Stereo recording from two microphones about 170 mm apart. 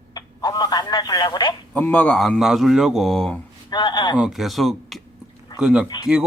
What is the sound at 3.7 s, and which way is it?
Speech, 25° left (ahead or behind).